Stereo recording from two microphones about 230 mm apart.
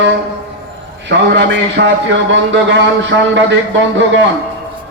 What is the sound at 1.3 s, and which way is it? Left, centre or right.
A man's voice, right.